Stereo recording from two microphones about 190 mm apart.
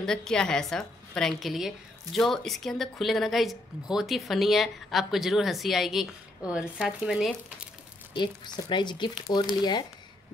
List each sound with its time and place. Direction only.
0.0 s a woman's voice: 5° left (ahead or behind)
8.1 s speech: 25° left (ahead or behind)